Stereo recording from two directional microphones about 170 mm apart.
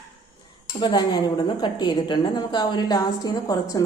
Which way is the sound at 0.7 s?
25° left (ahead or behind).